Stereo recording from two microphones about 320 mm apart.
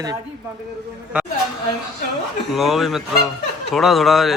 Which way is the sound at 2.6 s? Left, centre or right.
Centre.